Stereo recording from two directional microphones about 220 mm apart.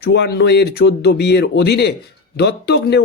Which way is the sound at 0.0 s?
50° left (ahead or behind).